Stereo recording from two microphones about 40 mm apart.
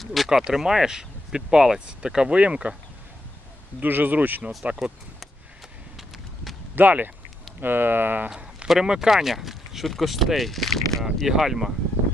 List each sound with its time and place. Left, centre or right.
0.0 s a sound: centre
0.3 s speech: centre
2.3 s speech: right
3.8 s speech: right
4.6 s speech: right
6.7 s speech: right
7.6 s speech: right
8.6 s speech: centre
11.2 s speech: centre